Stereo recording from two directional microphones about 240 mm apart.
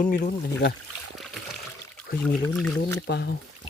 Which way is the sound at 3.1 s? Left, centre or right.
Left.